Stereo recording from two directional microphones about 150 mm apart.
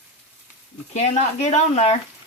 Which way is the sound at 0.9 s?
50° left (ahead or behind).